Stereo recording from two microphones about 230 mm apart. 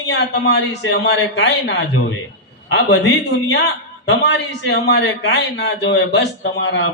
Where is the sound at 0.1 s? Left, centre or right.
Left.